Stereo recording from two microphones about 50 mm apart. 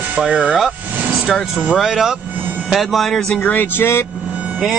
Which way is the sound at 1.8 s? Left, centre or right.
Centre.